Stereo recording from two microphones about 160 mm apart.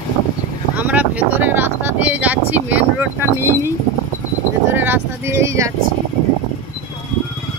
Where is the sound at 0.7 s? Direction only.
10° right (ahead or behind).